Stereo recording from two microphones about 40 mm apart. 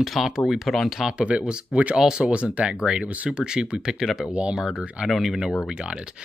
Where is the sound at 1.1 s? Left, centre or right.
Right.